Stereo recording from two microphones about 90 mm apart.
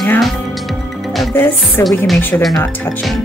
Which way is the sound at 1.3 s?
25° left (ahead or behind).